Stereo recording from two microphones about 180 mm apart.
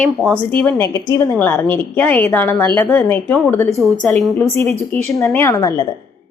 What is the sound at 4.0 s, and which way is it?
Speech, centre (ahead or behind).